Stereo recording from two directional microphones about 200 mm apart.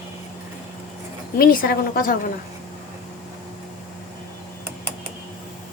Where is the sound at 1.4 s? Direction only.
45° left (ahead or behind).